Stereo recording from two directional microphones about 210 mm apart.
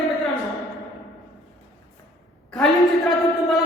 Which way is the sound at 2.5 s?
Centre (ahead or behind).